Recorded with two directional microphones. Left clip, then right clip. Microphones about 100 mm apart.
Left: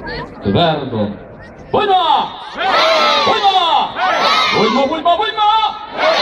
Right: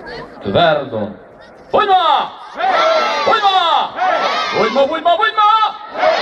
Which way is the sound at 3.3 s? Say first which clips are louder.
Even; 15° right (ahead or behind).